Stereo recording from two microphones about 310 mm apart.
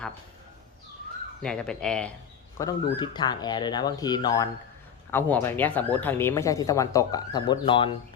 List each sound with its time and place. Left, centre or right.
1.4 s speech: centre